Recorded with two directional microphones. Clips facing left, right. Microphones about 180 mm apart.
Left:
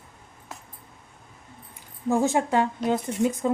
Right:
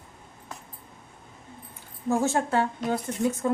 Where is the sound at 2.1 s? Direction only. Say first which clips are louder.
Left 2 dB; 15° left (ahead or behind).